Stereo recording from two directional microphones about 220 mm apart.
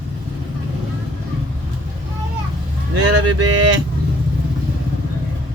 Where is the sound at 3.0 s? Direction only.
90° right.